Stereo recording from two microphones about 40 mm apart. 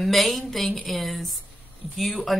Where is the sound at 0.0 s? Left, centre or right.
Centre.